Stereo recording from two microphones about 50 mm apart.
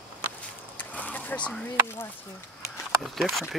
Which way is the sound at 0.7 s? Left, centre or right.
Left.